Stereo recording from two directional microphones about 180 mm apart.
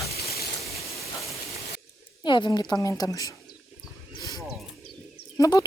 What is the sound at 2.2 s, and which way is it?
Speech, 25° left (ahead or behind).